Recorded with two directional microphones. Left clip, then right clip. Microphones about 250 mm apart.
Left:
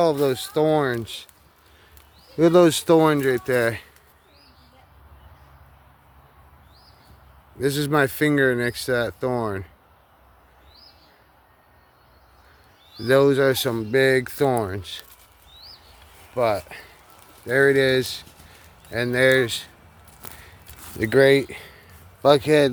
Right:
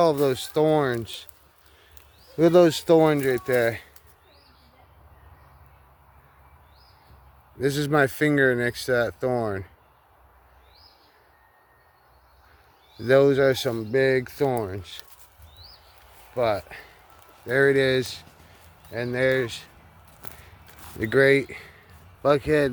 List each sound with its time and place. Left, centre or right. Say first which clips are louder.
0.0 s speech: left 1 dB; centre
2.4 s speech: left 1 dB; centre
7.6 s speech: left 1 dB; centre
13.1 s speech: left 1 dB; centre
16.3 s speech: left 2 dB; centre
18.9 s speech: left 5 dB; left
20.2 s a sound: left 3 dB; centre